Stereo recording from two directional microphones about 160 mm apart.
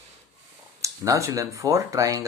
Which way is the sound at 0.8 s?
20° right (ahead or behind).